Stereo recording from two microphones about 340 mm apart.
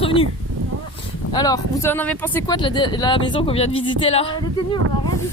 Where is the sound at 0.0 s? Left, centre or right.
Centre.